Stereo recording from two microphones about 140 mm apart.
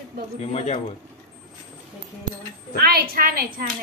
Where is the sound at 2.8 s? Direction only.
90° right.